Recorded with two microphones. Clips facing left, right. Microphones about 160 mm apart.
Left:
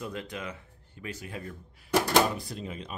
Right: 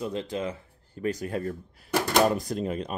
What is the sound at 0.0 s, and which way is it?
Speech, 25° right (ahead or behind).